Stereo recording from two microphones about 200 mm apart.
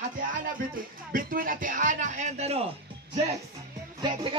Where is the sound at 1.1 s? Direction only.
45° right (ahead or behind).